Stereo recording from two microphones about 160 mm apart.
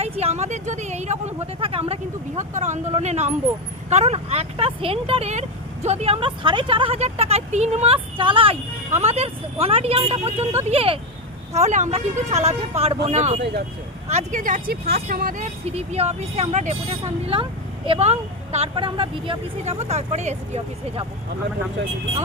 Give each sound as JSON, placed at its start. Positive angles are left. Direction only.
{"t": 0.0, "sound": "speech", "side_deg": -40}
{"t": 11.5, "sound": "speech", "side_deg": -45}